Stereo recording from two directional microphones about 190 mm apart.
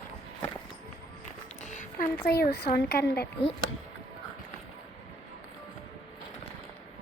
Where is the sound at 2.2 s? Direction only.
55° left (ahead or behind).